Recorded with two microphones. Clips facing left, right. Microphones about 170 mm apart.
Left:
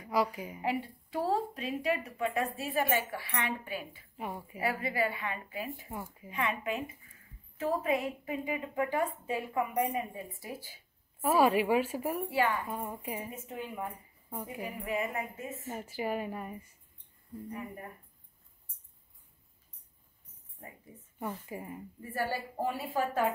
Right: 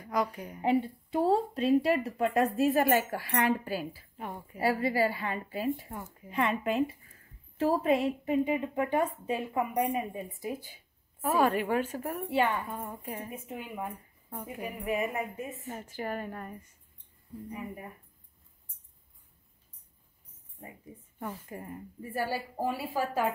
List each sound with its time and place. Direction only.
0.0 s a woman's voice: 5° left (ahead or behind)
0.6 s speech: 25° right (ahead or behind)
4.2 s a woman's voice: 10° left (ahead or behind)
4.6 s speech: 30° right (ahead or behind)
5.9 s a woman's voice: 5° left (ahead or behind)
6.3 s a woman's voice: 35° right (ahead or behind); by 10.8 s 20° right (ahead or behind)
11.2 s a woman's voice: 5° left (ahead or behind)
12.3 s a woman's voice: 25° right (ahead or behind)
12.7 s a woman's voice: 10° left (ahead or behind)
13.3 s a woman's voice: 15° right (ahead or behind)
15.7 s a woman's voice: 10° left (ahead or behind)
17.5 s a woman's voice: 10° right (ahead or behind)
21.2 s a woman's voice: 5° left (ahead or behind)
22.1 s a woman's voice: 10° right (ahead or behind)